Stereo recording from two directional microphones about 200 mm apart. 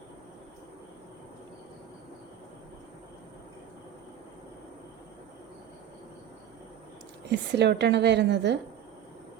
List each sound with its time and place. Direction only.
7.3 s a woman's voice: 60° right (ahead or behind)